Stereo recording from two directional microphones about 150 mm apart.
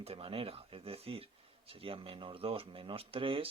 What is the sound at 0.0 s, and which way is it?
Speech, 40° right (ahead or behind).